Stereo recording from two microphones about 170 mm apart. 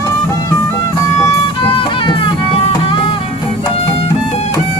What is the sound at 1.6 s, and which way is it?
Music, 30° left (ahead or behind).